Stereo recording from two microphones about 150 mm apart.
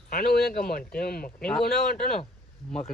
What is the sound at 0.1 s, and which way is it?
Speech, 90° left.